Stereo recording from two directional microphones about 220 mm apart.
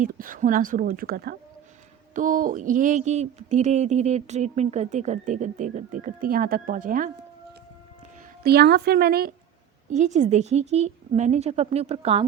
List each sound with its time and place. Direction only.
0.0 s a sound: 40° right (ahead or behind)
8.4 s a woman's voice: 45° right (ahead or behind)
9.9 s a woman's voice: 30° right (ahead or behind)